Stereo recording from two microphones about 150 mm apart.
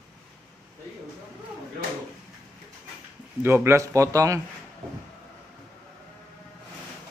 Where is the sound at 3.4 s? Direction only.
15° right (ahead or behind).